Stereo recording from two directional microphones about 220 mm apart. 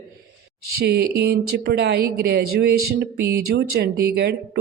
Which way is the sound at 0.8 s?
45° right (ahead or behind).